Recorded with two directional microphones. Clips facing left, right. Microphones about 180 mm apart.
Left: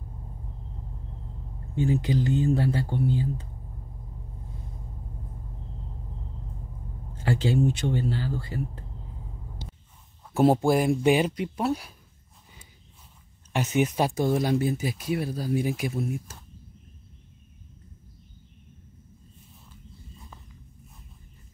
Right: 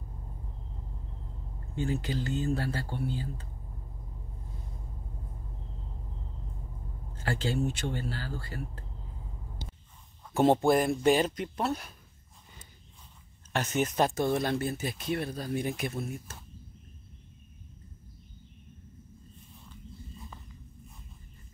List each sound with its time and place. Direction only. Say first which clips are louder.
1.8 s speech: left 7 dB; 15° left (ahead or behind)
7.2 s speech: left 6 dB; 15° left (ahead or behind)
10.3 s speech: left 2 dB; 5° left (ahead or behind)
13.5 s speech: left 5 dB; 15° left (ahead or behind)